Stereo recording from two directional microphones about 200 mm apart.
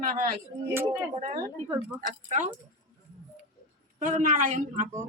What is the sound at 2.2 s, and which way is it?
Speech, 40° right (ahead or behind).